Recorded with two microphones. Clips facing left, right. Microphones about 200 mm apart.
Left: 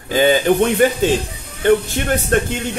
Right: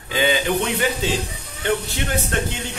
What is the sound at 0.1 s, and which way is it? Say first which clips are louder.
Speech: left 7 dB; 45° left (ahead or behind).